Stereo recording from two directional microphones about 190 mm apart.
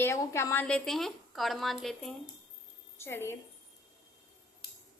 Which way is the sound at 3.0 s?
15° left (ahead or behind).